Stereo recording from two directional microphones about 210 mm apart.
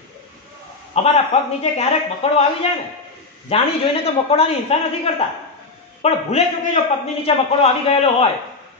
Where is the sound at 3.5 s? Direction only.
30° left (ahead or behind).